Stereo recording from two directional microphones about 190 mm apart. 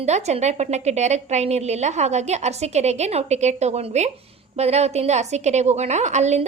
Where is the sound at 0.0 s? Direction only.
35° right (ahead or behind).